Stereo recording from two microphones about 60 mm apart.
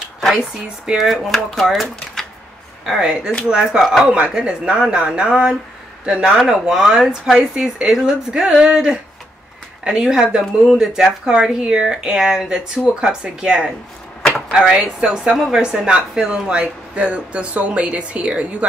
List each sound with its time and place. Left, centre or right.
0.2 s speech: centre
3.4 s speech: centre
3.8 s speech: centre
4.1 s speech: centre